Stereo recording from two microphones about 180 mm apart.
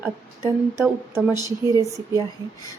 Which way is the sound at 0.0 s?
15° right (ahead or behind).